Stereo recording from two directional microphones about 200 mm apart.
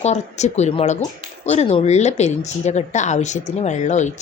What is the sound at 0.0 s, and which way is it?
Speech, 35° left (ahead or behind).